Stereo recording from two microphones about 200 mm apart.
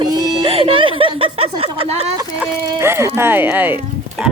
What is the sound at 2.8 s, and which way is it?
Speech, 15° right (ahead or behind).